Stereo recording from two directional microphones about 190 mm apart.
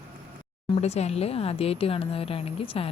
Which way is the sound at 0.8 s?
35° left (ahead or behind).